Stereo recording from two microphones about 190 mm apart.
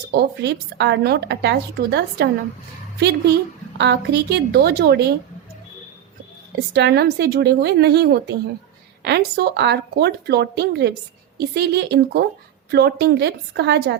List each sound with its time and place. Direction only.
0.1 s speech: 65° right (ahead or behind)
3.8 s speech: 65° right (ahead or behind)
6.7 s speech: 60° right (ahead or behind)